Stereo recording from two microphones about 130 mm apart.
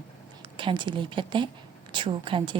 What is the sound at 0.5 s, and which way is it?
Speech, 35° right (ahead or behind).